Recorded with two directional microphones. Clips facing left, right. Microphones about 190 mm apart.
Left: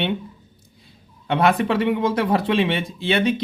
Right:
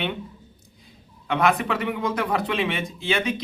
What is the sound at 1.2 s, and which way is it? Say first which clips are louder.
A man's voice: left 3 dB; 30° left (ahead or behind).